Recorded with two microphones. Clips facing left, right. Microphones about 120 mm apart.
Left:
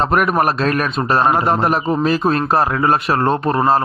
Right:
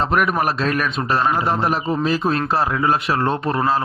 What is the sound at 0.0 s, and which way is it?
A man's voice, 45° left (ahead or behind).